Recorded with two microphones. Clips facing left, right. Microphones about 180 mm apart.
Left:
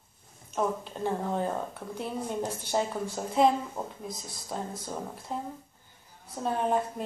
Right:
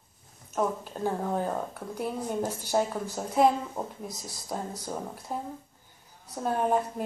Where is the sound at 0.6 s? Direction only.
5° right (ahead or behind).